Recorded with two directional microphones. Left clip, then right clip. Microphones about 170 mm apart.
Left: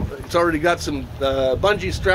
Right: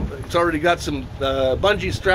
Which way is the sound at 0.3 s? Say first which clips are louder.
Even; 15° left (ahead or behind).